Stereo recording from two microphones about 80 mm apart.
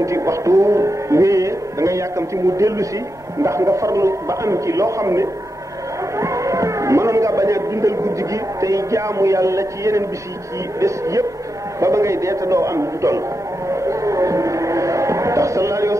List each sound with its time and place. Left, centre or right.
0.0 s music: right
3.4 s speech: right
13.7 s music: right